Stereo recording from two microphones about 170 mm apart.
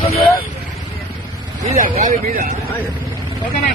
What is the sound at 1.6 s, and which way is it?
Speech, 40° right (ahead or behind).